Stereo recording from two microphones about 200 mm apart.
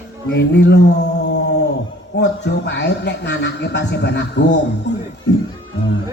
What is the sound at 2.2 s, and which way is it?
A man's voice, 60° left (ahead or behind).